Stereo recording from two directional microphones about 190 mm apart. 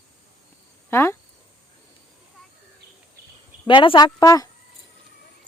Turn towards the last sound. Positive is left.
turn(degrees=20)  # may be behind; listen again after turning